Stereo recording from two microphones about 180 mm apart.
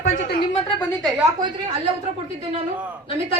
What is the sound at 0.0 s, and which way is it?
Speech, 45° left (ahead or behind).